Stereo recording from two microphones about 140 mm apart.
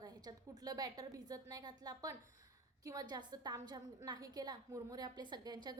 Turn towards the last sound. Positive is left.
turn(degrees=-30)  # may be behind; listen again after turning